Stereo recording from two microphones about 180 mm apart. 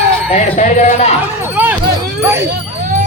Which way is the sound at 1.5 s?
10° right (ahead or behind).